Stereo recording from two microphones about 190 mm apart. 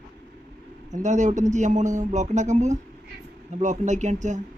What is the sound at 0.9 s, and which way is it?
A man's voice, 40° right (ahead or behind).